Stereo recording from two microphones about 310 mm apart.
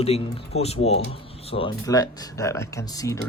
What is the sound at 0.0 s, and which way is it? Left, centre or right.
Speech, centre.